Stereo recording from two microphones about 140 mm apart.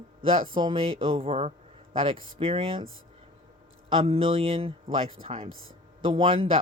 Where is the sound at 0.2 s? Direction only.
40° right (ahead or behind).